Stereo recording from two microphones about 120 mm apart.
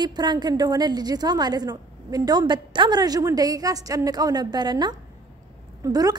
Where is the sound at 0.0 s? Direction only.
35° right (ahead or behind).